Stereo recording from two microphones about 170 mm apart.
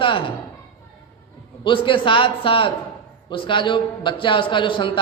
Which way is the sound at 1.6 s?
30° left (ahead or behind).